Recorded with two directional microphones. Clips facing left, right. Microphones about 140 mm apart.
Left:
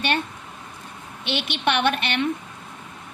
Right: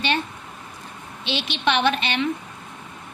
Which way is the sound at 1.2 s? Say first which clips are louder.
Even; 55° left (ahead or behind).